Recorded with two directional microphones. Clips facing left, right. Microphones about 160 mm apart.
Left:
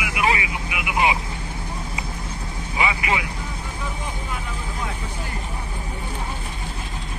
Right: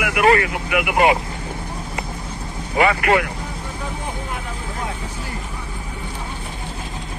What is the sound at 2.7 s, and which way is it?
Speech, 55° right (ahead or behind).